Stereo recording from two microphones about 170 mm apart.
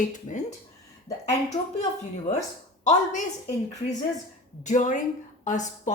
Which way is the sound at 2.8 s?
45° left (ahead or behind).